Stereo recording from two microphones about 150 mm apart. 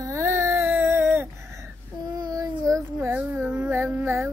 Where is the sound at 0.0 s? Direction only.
20° right (ahead or behind).